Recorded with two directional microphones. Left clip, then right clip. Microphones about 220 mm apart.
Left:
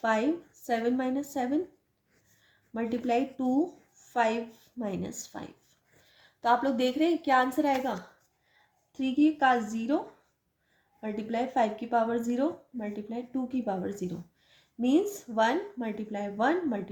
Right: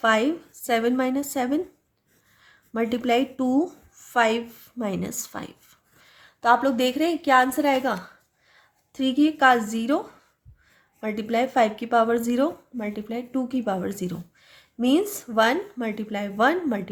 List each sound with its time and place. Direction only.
0.0 s a woman's voice: 30° right (ahead or behind)
11.0 s speech: 35° right (ahead or behind)